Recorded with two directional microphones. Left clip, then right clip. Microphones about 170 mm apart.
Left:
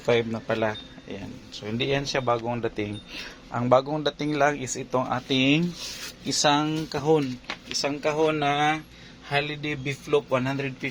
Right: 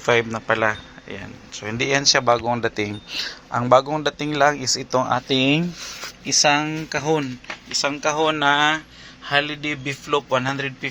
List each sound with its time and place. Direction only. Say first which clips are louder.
0.0 s a man's voice: right 4 dB; 10° right (ahead or behind)
4.9 s speech: right 5 dB; 15° right (ahead or behind)
6.2 s a man's voice: right 5 dB; centre (ahead or behind)
7.4 s a man's voice: right 5 dB; 10° right (ahead or behind)